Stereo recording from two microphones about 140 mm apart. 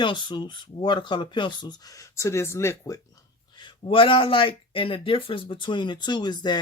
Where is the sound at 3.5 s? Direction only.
35° left (ahead or behind).